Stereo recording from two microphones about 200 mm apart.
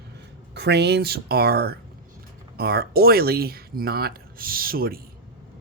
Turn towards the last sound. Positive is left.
turn(degrees=-50)  # may be behind; listen again after turning